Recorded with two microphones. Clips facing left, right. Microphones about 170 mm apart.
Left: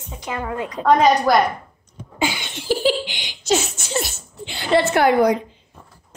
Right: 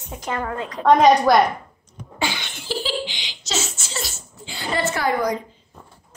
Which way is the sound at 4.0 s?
70° left (ahead or behind).